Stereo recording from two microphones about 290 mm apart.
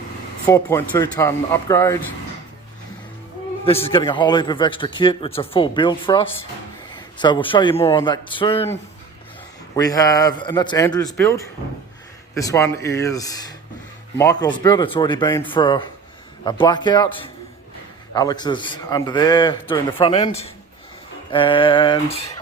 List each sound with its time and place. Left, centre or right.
0.4 s speech: centre
3.8 s speech: centre